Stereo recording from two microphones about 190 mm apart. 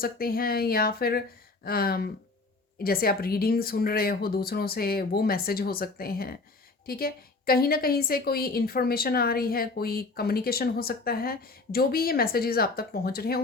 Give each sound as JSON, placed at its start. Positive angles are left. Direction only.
{"t": 0.0, "sound": "a woman's voice", "side_deg": 50}